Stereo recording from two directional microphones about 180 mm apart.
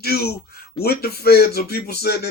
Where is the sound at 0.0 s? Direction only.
60° left (ahead or behind).